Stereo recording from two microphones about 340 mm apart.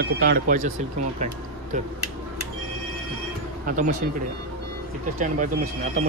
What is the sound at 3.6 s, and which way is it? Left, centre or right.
Speech, right.